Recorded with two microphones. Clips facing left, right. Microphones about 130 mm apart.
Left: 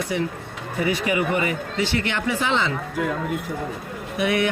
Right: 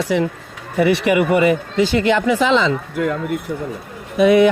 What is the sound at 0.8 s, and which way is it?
Speech, 80° right.